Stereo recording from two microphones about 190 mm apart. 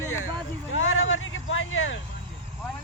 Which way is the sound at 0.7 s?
90° left.